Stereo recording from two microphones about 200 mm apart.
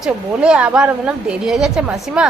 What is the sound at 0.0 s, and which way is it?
A woman's voice, 5° right (ahead or behind).